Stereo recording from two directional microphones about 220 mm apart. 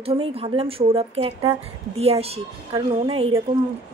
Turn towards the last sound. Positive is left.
turn(degrees=-25)  # may be behind; listen again after turning